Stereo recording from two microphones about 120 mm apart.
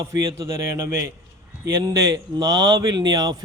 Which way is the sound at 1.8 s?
30° right (ahead or behind).